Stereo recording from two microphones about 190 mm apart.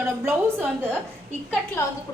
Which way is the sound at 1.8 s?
15° left (ahead or behind).